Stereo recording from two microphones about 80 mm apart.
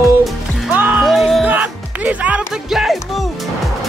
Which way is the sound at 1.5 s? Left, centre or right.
Centre.